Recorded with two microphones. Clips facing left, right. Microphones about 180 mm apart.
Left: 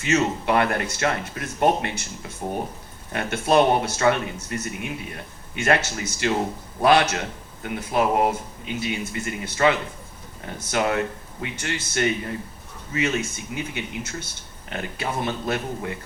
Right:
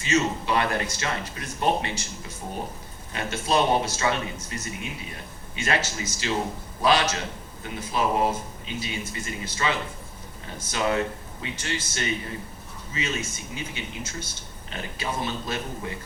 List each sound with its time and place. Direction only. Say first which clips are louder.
0.0 s a man's voice: left 2 dB; 60° left (ahead or behind)
3.1 s a man's voice: left 5 dB; 55° left (ahead or behind)